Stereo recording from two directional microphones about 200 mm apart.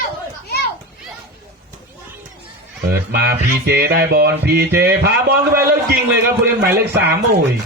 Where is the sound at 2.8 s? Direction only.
55° right (ahead or behind).